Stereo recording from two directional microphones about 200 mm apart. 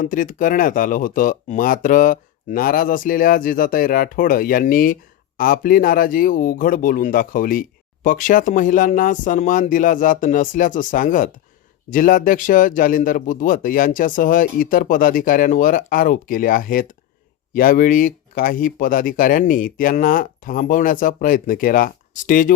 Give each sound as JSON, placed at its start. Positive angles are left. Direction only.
{"t": 0.0, "sound": "speech", "side_deg": 40}